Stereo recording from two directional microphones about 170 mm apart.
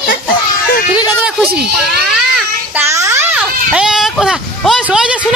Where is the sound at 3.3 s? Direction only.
5° right (ahead or behind).